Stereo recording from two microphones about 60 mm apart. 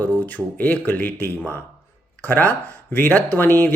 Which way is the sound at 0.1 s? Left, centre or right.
Left.